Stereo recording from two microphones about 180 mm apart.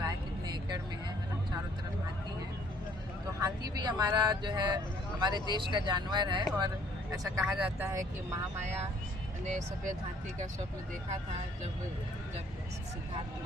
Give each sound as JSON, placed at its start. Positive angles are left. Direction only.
{"t": 0.0, "sound": "vehicle", "side_deg": -25}
{"t": 3.4, "sound": "speech", "side_deg": -20}
{"t": 7.3, "sound": "speech", "side_deg": -5}
{"t": 9.4, "sound": "speech", "side_deg": -40}